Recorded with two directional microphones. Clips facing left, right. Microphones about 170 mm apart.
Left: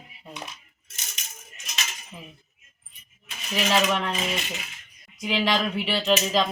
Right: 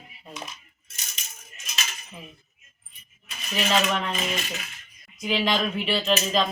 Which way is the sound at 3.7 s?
10° left (ahead or behind).